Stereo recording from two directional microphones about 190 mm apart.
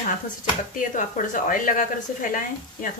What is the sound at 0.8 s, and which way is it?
Speech, 45° left (ahead or behind).